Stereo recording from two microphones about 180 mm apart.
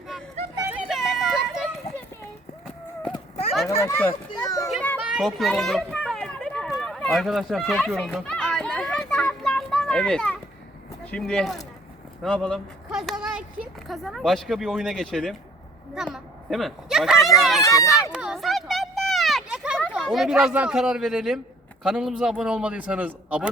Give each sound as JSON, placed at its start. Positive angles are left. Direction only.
{"t": 0.7, "sound": "a sound", "side_deg": 0}
{"t": 3.1, "sound": "clip-clop", "side_deg": 35}
{"t": 3.8, "sound": "a child's voice", "side_deg": 15}
{"t": 4.3, "sound": "children playing", "side_deg": 20}
{"t": 4.7, "sound": "children playing", "side_deg": 5}
{"t": 4.9, "sound": "children playing", "side_deg": -5}
{"t": 11.0, "sound": "speech", "side_deg": 5}
{"t": 16.0, "sound": "a sound", "side_deg": 0}
{"t": 19.9, "sound": "a man's voice", "side_deg": 0}